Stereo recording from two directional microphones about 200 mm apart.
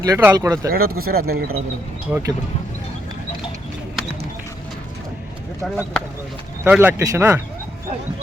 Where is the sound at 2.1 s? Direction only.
10° right (ahead or behind).